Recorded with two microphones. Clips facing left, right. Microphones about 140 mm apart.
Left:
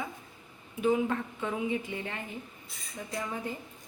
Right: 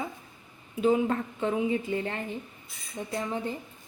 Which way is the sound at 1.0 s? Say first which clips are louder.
Right 4 dB; 35° right (ahead or behind).